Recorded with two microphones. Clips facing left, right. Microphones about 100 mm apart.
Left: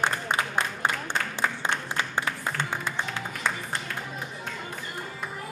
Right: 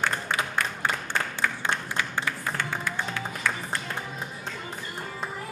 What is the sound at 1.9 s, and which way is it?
Music, 25° left (ahead or behind).